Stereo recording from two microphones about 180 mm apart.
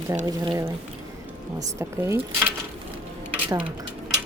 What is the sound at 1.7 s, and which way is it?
Speech, 15° right (ahead or behind).